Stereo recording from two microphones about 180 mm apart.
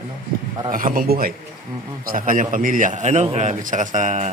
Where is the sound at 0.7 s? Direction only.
50° right (ahead or behind).